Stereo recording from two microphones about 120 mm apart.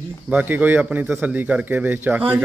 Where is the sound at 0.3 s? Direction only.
15° right (ahead or behind).